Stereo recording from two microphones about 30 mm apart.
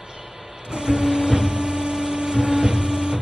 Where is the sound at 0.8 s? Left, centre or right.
Centre.